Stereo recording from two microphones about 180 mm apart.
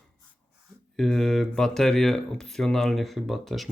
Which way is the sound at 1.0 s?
Centre (ahead or behind).